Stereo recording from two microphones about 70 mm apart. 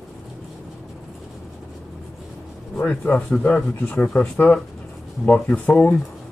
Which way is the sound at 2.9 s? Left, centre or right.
Centre.